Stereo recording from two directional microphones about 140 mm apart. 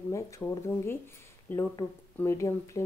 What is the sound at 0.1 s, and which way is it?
Speech, 20° left (ahead or behind).